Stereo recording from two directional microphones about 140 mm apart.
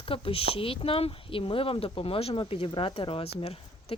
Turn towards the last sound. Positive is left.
turn(degrees=45)  # may be behind; listen again after turning